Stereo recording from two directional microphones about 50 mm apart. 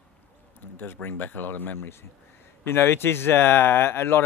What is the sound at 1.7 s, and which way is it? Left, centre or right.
Speech, left.